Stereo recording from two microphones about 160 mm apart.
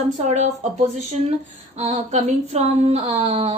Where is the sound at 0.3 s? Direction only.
45° right (ahead or behind).